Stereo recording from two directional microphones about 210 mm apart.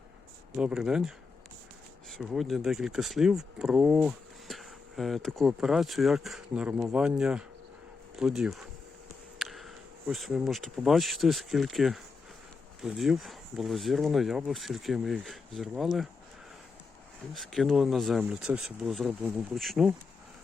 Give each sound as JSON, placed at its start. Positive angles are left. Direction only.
{"t": 0.5, "sound": "speech", "side_deg": -5}
{"t": 17.3, "sound": "speech", "side_deg": 0}